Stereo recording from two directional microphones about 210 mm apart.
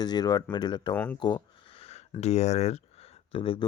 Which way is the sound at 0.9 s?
5° left (ahead or behind).